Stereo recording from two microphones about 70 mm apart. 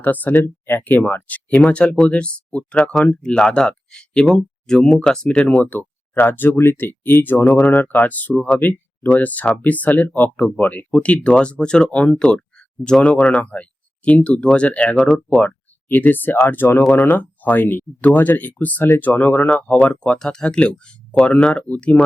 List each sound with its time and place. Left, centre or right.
0.0 s speech: left